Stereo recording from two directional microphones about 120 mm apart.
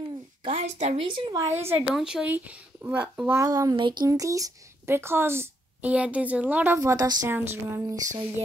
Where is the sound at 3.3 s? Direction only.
30° right (ahead or behind).